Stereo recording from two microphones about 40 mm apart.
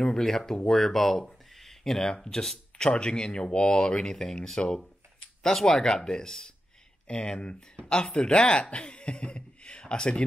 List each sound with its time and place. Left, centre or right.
0.0 s speech: centre
7.1 s speech: left